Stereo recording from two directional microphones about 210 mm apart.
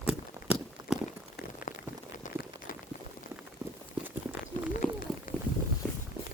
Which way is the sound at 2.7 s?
40° left (ahead or behind).